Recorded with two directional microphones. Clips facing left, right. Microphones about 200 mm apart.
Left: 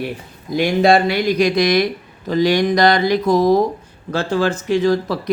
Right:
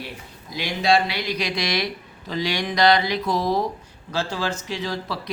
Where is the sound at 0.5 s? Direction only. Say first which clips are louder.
Left 7 dB; 50° left (ahead or behind).